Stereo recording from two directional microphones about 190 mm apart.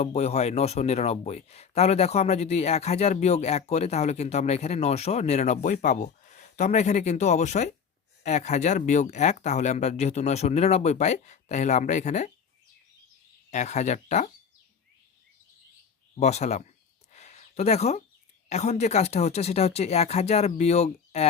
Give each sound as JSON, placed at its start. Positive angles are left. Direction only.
{"t": 0.0, "sound": "speech", "side_deg": 35}
{"t": 13.5, "sound": "speech", "side_deg": 40}
{"t": 16.1, "sound": "a sound", "side_deg": 35}
{"t": 18.4, "sound": "speech", "side_deg": 35}